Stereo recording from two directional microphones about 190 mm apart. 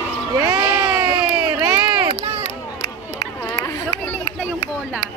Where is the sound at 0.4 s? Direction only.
20° right (ahead or behind).